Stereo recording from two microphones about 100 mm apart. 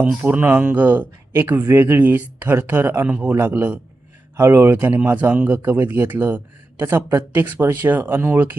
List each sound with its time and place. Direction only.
0.2 s speech: 20° right (ahead or behind)